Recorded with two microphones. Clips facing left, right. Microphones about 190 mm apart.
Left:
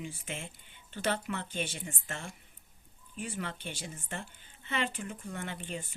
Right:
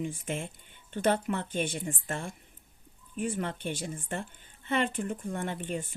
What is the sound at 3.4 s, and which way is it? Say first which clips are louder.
Speech: right 6 dB; 50° right (ahead or behind).